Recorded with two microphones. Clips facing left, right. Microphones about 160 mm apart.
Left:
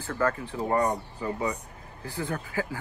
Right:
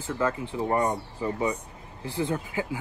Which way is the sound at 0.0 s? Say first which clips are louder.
Even; 15° right (ahead or behind).